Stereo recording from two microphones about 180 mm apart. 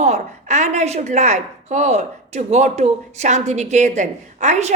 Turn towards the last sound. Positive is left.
turn(degrees=-40)  # may be behind; listen again after turning